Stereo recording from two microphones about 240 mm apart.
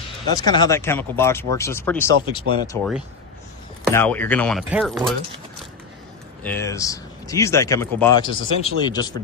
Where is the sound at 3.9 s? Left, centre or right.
Centre.